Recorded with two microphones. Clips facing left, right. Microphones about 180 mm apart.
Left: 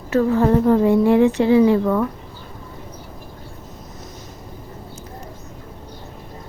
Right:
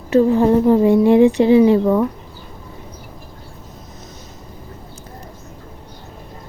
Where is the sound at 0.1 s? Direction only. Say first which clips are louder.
Right 3 dB; 20° right (ahead or behind).